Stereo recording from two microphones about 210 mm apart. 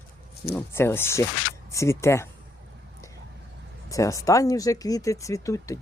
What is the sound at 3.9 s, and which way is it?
Speech, 15° left (ahead or behind).